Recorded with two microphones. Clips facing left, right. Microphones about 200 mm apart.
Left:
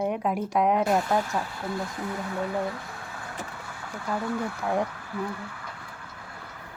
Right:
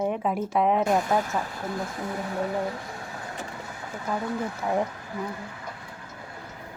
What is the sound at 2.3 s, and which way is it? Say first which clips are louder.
Vehicle: right 1 dB; 20° right (ahead or behind).